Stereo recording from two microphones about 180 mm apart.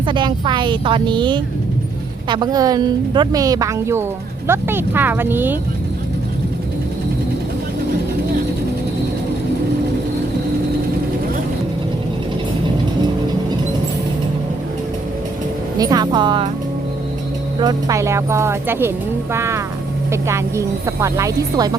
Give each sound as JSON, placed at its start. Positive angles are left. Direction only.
{"t": 0.0, "sound": "speech", "side_deg": -25}
{"t": 15.8, "sound": "speech", "side_deg": -20}
{"t": 17.6, "sound": "speech", "side_deg": -20}